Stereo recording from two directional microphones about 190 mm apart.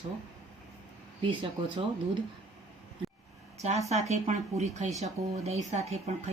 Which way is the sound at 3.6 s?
35° right (ahead or behind).